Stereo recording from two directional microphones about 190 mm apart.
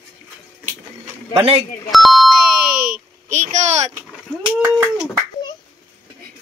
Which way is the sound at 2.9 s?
40° right (ahead or behind).